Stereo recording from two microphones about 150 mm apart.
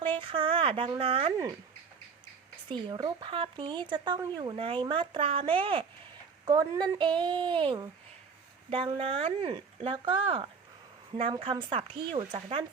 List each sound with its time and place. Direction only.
0.0 s a sound: 35° right (ahead or behind)
2.6 s speech: 30° right (ahead or behind)
4.5 s speech: 35° right (ahead or behind)
6.4 s speech: 25° right (ahead or behind)